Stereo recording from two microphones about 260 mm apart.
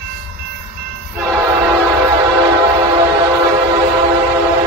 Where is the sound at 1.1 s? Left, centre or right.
Centre.